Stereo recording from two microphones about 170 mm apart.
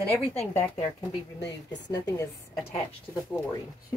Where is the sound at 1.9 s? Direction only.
20° left (ahead or behind).